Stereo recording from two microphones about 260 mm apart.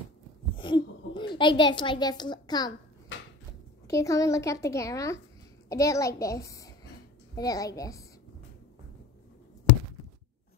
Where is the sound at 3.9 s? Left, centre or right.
Centre.